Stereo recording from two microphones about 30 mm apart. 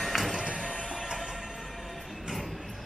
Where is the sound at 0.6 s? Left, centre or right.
Centre.